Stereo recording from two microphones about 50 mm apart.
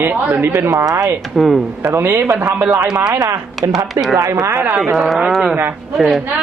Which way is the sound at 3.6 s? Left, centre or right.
Right.